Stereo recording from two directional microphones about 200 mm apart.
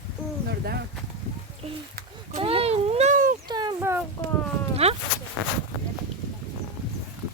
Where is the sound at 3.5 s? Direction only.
20° right (ahead or behind).